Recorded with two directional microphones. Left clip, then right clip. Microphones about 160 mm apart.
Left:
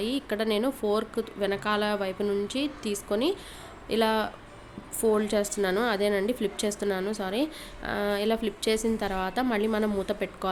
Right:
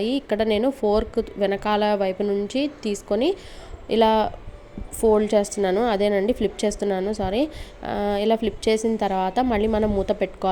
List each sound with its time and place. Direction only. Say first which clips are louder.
0.0 s a woman's voice: right 6 dB; 35° right (ahead or behind)